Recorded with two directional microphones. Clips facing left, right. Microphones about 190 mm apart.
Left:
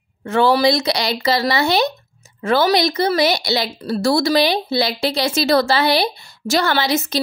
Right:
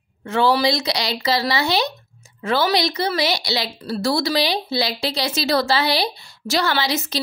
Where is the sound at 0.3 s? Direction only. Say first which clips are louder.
Left 3 dB; 50° left (ahead or behind).